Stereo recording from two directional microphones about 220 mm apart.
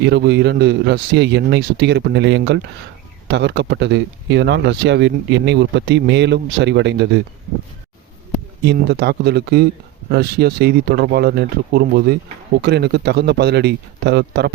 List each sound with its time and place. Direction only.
0.0 s speech: 50° right (ahead or behind)
8.6 s speech: 50° right (ahead or behind)